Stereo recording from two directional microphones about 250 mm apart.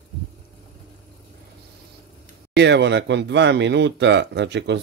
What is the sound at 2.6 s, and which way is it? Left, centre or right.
A man's voice, right.